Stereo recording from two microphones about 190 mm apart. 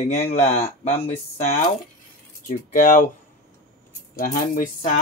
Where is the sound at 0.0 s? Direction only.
35° left (ahead or behind).